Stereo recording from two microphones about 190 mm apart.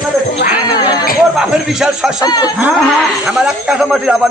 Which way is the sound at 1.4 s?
5° right (ahead or behind).